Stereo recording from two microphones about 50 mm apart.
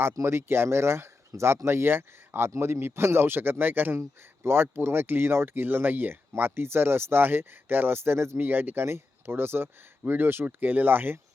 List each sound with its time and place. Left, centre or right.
0.0 s speech: right
2.5 s speech: right
3.9 s speech: right
8.4 s speech: right